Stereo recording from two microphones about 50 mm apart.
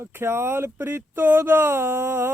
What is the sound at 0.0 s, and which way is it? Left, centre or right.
Speech, right.